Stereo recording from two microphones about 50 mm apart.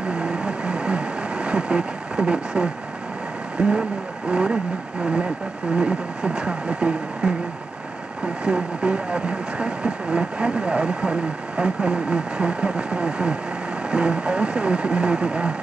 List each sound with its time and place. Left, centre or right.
0.1 s vehicle: right
3.5 s speech: centre
8.5 s speech: centre